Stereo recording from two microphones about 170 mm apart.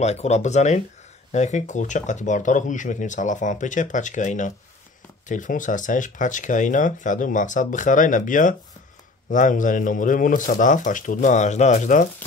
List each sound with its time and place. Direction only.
0.0 s speech: 40° left (ahead or behind)